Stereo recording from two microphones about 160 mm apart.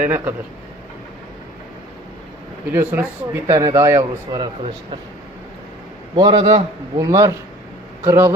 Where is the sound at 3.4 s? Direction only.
20° right (ahead or behind).